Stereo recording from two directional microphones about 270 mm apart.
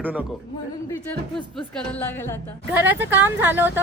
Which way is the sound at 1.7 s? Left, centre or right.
Centre.